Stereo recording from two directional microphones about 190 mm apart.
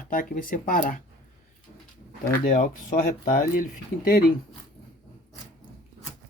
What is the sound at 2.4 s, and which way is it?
Speech, 45° left (ahead or behind).